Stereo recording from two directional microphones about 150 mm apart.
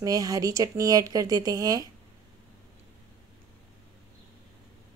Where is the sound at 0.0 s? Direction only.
25° right (ahead or behind).